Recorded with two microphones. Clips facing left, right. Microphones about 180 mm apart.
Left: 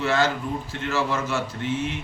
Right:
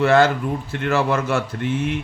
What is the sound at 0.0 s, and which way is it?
Speech, 55° right (ahead or behind).